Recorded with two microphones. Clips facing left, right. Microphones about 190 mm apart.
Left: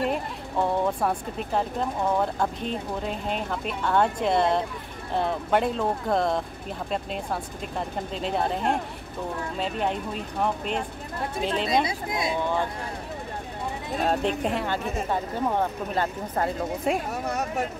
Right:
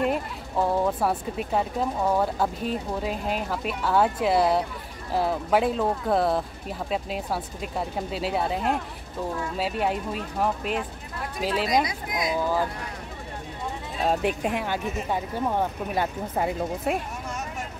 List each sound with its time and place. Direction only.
0.1 s speech: centre (ahead or behind)
11.6 s speech: 30° left (ahead or behind)
14.0 s speech: 10° right (ahead or behind)
17.1 s a sound: 65° left (ahead or behind)